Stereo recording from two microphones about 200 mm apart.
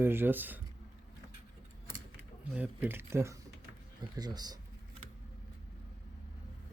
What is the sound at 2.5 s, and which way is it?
Speech, 10° right (ahead or behind).